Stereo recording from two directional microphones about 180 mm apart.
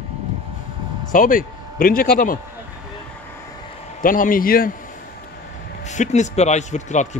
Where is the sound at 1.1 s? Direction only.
50° left (ahead or behind).